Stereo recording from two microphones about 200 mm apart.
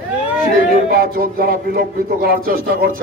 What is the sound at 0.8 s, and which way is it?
A man's voice, 50° right (ahead or behind).